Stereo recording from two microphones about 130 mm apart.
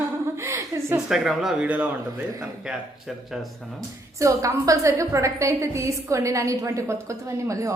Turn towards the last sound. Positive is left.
turn(degrees=-25)  # may be behind; listen again after turning